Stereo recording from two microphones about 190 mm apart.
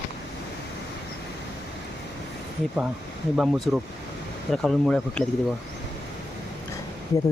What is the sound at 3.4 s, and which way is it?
Speech, centre (ahead or behind).